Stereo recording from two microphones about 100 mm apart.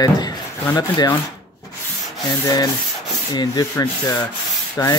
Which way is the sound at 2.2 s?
40° left (ahead or behind).